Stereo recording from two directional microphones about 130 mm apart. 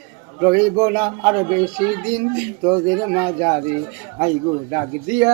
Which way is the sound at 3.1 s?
35° right (ahead or behind).